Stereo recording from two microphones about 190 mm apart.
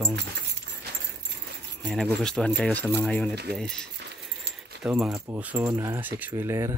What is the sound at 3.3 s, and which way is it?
Speech, 60° right (ahead or behind).